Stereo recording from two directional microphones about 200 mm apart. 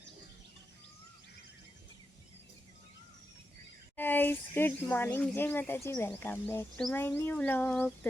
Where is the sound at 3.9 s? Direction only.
10° left (ahead or behind).